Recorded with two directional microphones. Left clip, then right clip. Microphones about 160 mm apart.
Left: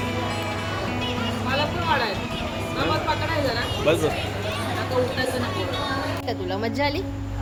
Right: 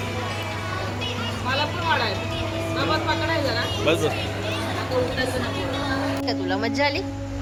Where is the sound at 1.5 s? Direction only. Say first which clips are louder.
Right 1 dB; 75° left (ahead or behind).